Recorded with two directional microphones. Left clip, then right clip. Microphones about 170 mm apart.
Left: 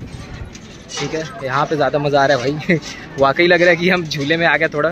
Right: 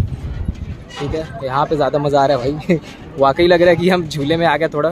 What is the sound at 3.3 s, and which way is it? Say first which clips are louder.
Speech: right 1 dB; 20° right (ahead or behind).